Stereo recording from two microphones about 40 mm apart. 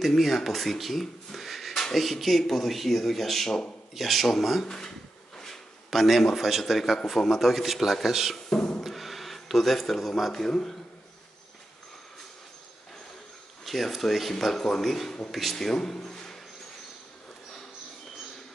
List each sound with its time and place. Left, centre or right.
0.0 s speech: centre
4.6 s speech: centre
5.9 s a man's voice: centre
8.5 s a sound: centre
8.8 s a sound: centre
10.5 s speech: centre
13.7 s speech: centre